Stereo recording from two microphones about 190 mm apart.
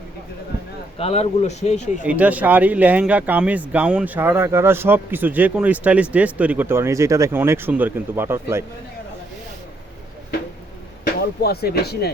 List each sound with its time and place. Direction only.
0.9 s speech: 30° left (ahead or behind)
2.0 s speech: 5° right (ahead or behind)
11.4 s speech: 55° left (ahead or behind)